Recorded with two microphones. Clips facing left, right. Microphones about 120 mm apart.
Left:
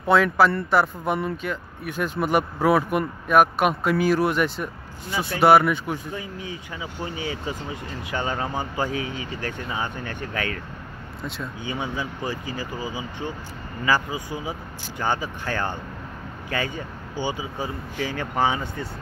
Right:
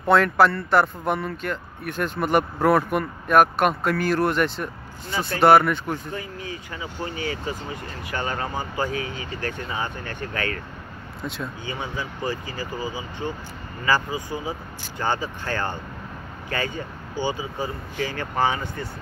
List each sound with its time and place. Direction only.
0.0 s speech: 5° left (ahead or behind)
11.6 s speech: 15° left (ahead or behind)